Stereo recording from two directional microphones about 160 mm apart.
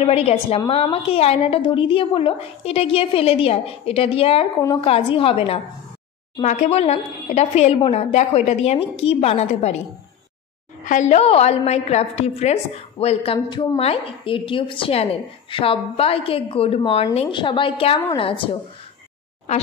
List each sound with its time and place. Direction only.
0.0 s a woman's voice: 40° left (ahead or behind)
6.4 s a woman's voice: 50° left (ahead or behind)
10.8 s a woman's voice: 50° left (ahead or behind); by 18.6 s 35° left (ahead or behind)